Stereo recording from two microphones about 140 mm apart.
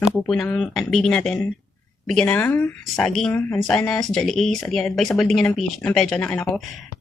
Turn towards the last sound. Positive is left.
turn(degrees=5)  # may be behind; listen again after turning